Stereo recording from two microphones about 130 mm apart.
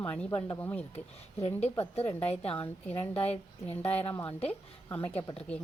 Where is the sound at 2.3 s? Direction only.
50° left (ahead or behind).